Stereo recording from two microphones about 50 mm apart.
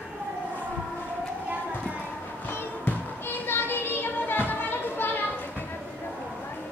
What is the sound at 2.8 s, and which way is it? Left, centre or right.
Music, left.